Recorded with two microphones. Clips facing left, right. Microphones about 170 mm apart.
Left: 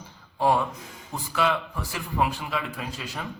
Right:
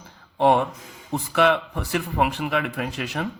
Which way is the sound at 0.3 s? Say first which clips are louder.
Right 4 dB; 65° right (ahead or behind).